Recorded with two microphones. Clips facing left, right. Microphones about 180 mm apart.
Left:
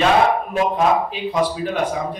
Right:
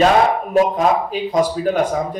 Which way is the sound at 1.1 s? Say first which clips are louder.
Right 3 dB; 45° right (ahead or behind).